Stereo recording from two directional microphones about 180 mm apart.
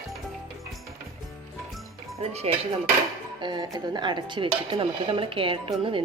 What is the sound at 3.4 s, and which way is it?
Speech, 25° right (ahead or behind).